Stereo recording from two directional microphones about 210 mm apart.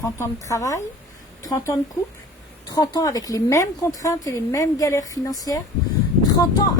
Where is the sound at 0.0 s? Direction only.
15° left (ahead or behind).